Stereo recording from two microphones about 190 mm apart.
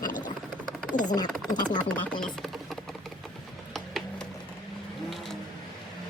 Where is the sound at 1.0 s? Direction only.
20° left (ahead or behind).